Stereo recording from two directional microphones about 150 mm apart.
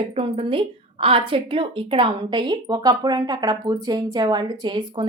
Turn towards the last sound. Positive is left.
turn(degrees=-30)  # may be behind; listen again after turning